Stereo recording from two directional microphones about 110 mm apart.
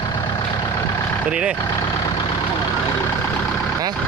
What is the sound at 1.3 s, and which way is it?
Speech, 10° right (ahead or behind).